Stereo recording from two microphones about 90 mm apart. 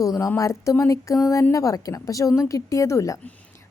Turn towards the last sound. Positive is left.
turn(degrees=35)  # may be behind; listen again after turning